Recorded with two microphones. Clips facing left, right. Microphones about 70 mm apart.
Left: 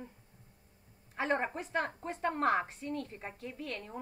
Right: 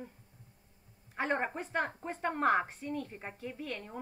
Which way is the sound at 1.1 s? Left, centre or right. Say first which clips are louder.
Left 1 dB; centre.